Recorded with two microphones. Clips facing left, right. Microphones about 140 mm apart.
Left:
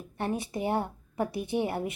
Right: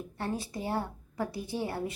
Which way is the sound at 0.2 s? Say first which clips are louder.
Left 4 dB; 20° left (ahead or behind).